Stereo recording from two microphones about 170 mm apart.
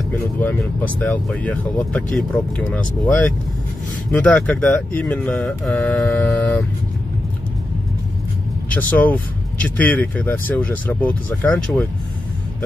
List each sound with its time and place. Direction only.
0.4 s speech: 10° left (ahead or behind)
8.6 s speech: 10° left (ahead or behind)